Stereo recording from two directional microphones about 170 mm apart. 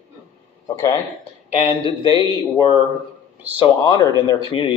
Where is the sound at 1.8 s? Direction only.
30° left (ahead or behind).